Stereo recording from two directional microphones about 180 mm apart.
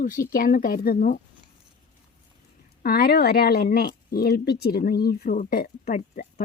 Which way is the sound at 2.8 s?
55° left (ahead or behind).